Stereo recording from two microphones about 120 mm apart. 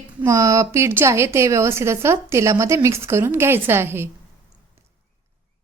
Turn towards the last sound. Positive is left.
turn(degrees=-20)  # may be behind; listen again after turning